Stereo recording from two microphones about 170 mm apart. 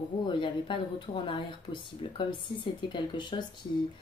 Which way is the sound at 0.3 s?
30° left (ahead or behind).